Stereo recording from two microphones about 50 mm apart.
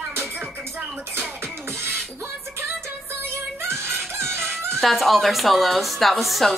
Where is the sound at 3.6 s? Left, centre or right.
Right.